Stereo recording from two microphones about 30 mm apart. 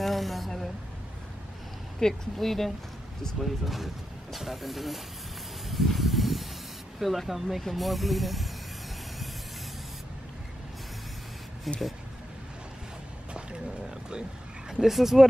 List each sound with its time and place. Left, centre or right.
0.0 s a sound: centre
2.0 s speech: centre
3.3 s speech: centre
5.7 s a sound: centre
7.0 s speech: centre
11.7 s speech: centre
14.8 s speech: centre